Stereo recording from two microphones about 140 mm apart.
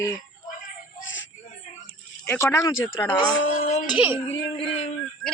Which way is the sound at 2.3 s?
15° left (ahead or behind).